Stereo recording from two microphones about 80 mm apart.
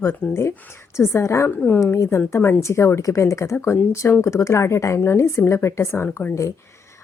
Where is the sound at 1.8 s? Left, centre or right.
Left.